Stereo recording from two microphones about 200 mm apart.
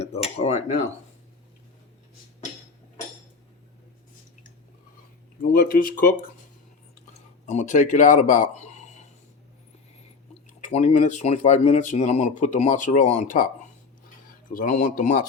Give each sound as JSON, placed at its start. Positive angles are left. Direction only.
{"t": 0.0, "sound": "cutlery", "side_deg": 30}
{"t": 5.4, "sound": "speech", "side_deg": 45}
{"t": 7.4, "sound": "speech", "side_deg": 35}
{"t": 10.6, "sound": "speech", "side_deg": 35}